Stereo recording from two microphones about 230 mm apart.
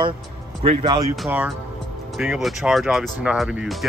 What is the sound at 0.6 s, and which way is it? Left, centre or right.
Speech, centre.